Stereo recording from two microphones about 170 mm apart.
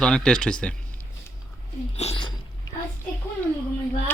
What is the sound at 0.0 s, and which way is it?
Speech, 5° left (ahead or behind).